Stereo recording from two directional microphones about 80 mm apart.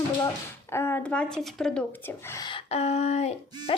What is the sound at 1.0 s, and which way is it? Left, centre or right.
Speech, centre.